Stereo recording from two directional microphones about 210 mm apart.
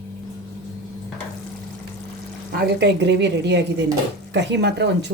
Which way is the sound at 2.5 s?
45° right (ahead or behind).